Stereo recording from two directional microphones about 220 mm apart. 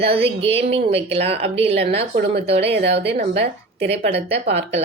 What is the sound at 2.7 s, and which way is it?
A woman's voice, 50° right (ahead or behind).